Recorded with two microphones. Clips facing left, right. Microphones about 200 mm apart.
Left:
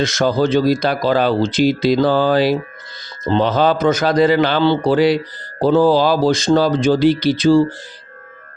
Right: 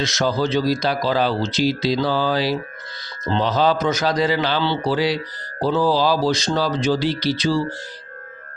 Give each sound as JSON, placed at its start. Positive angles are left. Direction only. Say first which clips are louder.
{"t": 0.0, "sound": "speech", "louder": "left 5 dB", "side_deg": 50}